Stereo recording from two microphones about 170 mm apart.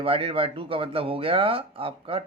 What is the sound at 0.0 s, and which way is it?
Speech, 35° right (ahead or behind).